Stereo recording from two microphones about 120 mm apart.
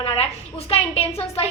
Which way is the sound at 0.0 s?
55° left (ahead or behind).